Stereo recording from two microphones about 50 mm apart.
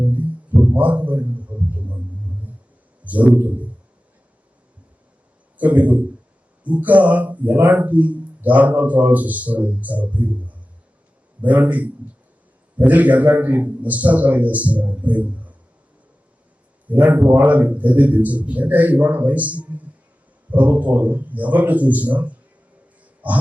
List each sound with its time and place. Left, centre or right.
0.1 s a sound: right
3.0 s a man's voice: right
5.5 s speech: right
16.9 s speech: right
23.2 s grunt: right